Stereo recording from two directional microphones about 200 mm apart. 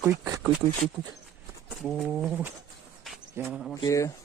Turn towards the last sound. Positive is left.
turn(degrees=15)  # may be behind; listen again after turning